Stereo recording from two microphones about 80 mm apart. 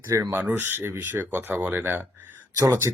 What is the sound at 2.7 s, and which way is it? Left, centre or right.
Speech, right.